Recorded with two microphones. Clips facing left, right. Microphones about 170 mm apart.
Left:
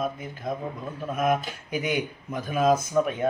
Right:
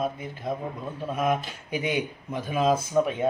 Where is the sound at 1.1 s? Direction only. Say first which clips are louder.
Left 1 dB; 25° right (ahead or behind).